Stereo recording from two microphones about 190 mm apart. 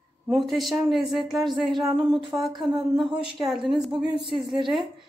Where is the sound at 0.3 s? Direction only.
Centre (ahead or behind).